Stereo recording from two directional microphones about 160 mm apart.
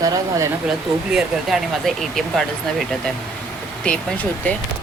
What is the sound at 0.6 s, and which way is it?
Speech, 5° right (ahead or behind).